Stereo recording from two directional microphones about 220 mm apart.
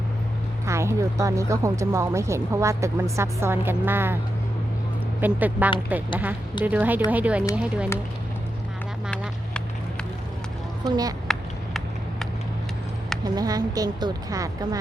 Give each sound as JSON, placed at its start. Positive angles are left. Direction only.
{"t": 0.6, "sound": "speech", "side_deg": -15}
{"t": 5.2, "sound": "speech", "side_deg": -5}
{"t": 10.8, "sound": "speech", "side_deg": -20}
{"t": 11.3, "sound": "a sound", "side_deg": 0}
{"t": 13.2, "sound": "speech", "side_deg": -15}